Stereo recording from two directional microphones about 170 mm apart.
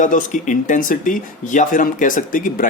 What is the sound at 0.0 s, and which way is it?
Speech, 50° left (ahead or behind).